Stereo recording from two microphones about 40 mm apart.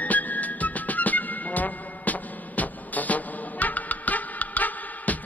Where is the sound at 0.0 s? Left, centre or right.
Left.